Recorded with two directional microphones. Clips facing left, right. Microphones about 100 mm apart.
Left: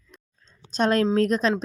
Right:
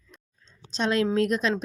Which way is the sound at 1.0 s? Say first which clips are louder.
Left 3 dB; 35° left (ahead or behind).